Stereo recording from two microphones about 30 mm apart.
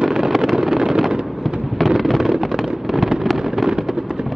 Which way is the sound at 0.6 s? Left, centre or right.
Centre.